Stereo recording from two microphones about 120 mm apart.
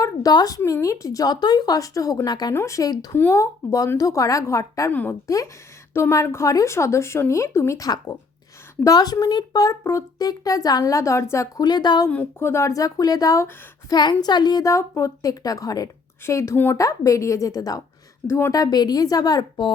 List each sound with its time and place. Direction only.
0.0 s a woman's voice: 35° left (ahead or behind)
2.5 s a woman's voice: 25° left (ahead or behind)
3.2 s a woman's voice: 20° left (ahead or behind)
4.9 s a woman's voice: 15° left (ahead or behind); by 12.0 s 35° left (ahead or behind)
12.0 s a woman's voice: 15° left (ahead or behind); by 19.7 s 35° left (ahead or behind)